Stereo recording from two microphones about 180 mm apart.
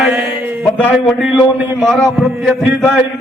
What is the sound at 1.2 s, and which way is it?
Speech, 10° right (ahead or behind).